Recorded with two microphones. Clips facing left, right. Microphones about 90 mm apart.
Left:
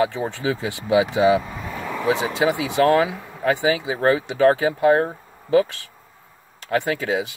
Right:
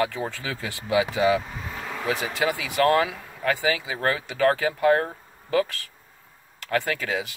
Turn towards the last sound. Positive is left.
turn(degrees=25)  # may be behind; listen again after turning